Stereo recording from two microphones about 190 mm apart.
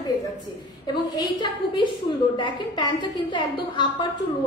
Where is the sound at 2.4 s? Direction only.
25° left (ahead or behind).